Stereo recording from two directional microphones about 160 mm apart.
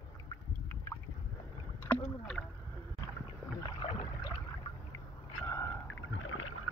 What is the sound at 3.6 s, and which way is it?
Rowboat, 35° left (ahead or behind).